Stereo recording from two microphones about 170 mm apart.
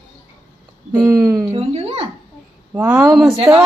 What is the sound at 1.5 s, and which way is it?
Speech, 35° right (ahead or behind).